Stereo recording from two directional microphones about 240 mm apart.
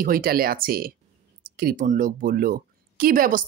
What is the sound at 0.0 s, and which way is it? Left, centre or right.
Speech, right.